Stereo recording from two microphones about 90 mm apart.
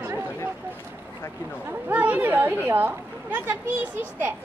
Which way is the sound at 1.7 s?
20° right (ahead or behind).